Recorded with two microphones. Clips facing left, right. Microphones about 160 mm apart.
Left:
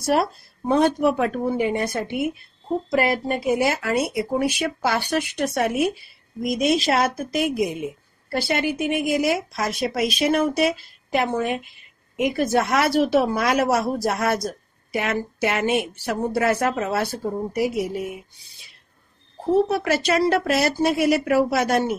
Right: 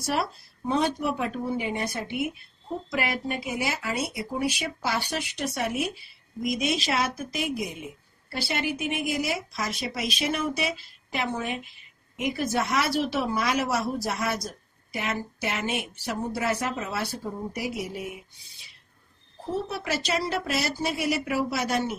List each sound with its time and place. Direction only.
0.0 s a woman's voice: 50° left (ahead or behind)
19.7 s speech: 55° left (ahead or behind)